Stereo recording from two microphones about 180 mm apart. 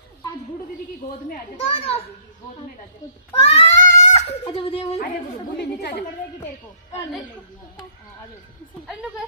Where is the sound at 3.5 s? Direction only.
35° left (ahead or behind).